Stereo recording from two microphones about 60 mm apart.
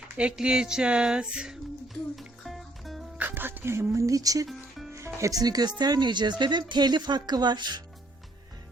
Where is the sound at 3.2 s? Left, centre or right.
Right.